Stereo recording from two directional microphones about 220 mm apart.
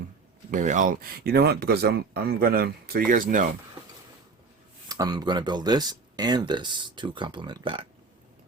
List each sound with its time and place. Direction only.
0.5 s speech: 35° right (ahead or behind)
4.9 s speech: 15° right (ahead or behind)